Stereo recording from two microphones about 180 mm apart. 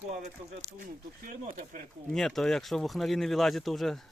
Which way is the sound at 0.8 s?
50° right (ahead or behind).